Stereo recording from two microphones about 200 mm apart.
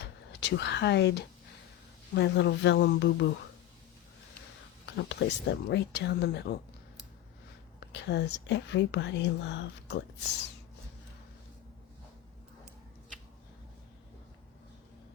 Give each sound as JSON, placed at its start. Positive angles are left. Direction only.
{"t": 0.3, "sound": "speech", "side_deg": 60}
{"t": 4.9, "sound": "speech", "side_deg": 60}
{"t": 7.8, "sound": "speech", "side_deg": 55}